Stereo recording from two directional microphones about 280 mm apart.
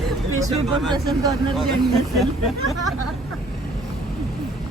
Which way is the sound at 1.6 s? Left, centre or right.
Centre.